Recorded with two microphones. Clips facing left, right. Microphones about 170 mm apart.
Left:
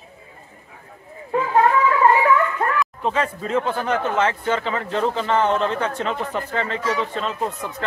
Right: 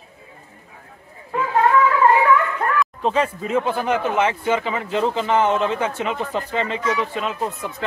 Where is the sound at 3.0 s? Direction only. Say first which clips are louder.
Right 3 dB; 15° right (ahead or behind).